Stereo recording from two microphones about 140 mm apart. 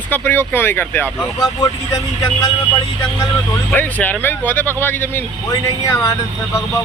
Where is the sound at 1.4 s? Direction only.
25° left (ahead or behind).